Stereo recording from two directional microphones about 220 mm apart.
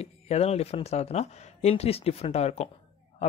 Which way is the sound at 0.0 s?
30° left (ahead or behind).